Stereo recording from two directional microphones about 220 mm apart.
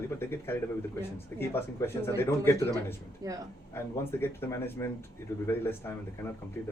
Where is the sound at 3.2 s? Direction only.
15° right (ahead or behind).